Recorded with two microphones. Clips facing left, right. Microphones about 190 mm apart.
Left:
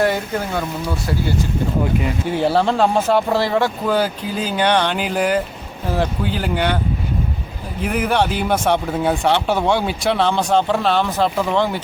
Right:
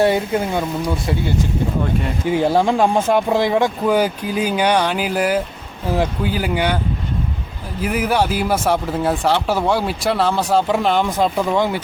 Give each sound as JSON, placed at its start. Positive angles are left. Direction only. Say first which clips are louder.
{"t": 0.0, "sound": "speech", "louder": "right 3 dB", "side_deg": -25}
{"t": 2.3, "sound": "speech", "louder": "right 2 dB", "side_deg": -15}
{"t": 7.8, "sound": "speech", "louder": "even", "side_deg": -5}